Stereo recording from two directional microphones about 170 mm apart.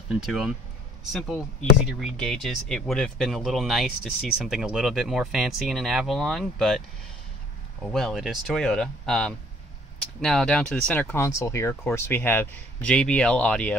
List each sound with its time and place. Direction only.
0.1 s speech: 5° right (ahead or behind)
7.8 s speech: 5° left (ahead or behind)